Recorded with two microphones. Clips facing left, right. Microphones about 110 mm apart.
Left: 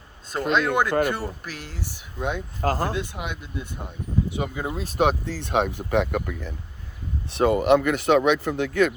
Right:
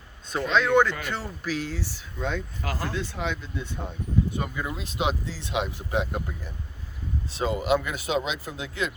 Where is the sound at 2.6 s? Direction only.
45° left (ahead or behind).